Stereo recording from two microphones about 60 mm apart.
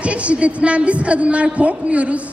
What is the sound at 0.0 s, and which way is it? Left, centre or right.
Speech, right.